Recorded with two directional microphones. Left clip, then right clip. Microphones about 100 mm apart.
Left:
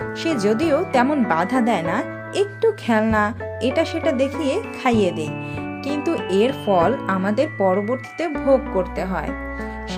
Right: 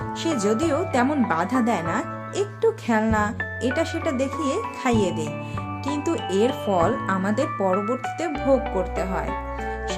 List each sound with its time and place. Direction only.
0.2 s speech: 25° left (ahead or behind)